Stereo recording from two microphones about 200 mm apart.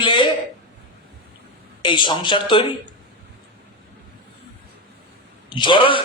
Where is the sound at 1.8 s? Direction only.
25° left (ahead or behind).